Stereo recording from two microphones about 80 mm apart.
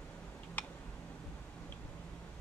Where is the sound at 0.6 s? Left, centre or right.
Left.